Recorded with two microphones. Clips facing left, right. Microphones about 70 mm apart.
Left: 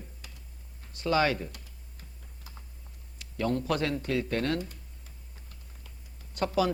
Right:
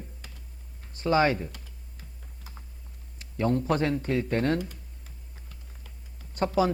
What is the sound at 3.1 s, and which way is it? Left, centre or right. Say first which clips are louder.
A man's voice: right 3 dB; right.